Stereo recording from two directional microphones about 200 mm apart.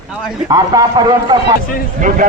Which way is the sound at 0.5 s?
20° right (ahead or behind).